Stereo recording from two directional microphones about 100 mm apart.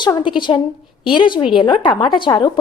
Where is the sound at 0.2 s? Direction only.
55° left (ahead or behind).